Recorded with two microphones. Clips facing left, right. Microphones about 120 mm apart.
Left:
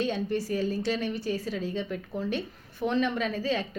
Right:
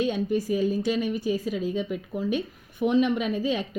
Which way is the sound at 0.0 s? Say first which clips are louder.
Right 3 dB; 15° right (ahead or behind).